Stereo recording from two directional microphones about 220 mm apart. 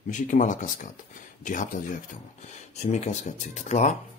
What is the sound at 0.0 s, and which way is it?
Speech, 35° left (ahead or behind).